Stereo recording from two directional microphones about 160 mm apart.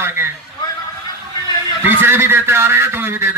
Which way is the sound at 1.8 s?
15° right (ahead or behind).